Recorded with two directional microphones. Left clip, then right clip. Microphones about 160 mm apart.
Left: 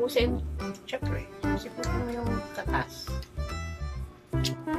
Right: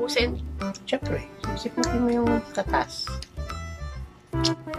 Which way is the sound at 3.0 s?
Centre (ahead or behind).